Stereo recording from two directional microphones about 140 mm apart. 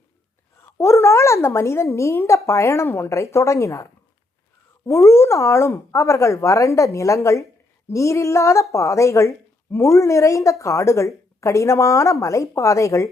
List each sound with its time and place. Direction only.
0.8 s a woman's voice: 20° left (ahead or behind)
4.9 s a woman's voice: 20° left (ahead or behind)